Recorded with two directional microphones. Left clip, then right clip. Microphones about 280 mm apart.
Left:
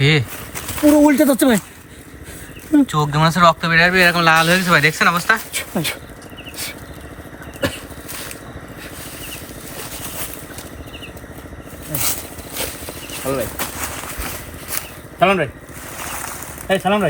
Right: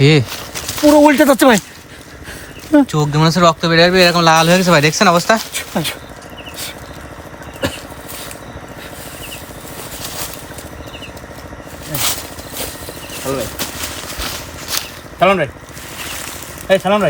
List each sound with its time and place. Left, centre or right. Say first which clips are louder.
0.0 s speech: right 4 dB; centre
1.2 s speech: right 5 dB; centre
2.8 s speech: right 1 dB; centre
5.5 s speech: right 2 dB; centre
7.6 s vehicle: right 1 dB; centre
13.2 s speech: right 1 dB; centre
15.2 s speech: right 3 dB; centre
16.2 s a sound: right 2 dB; centre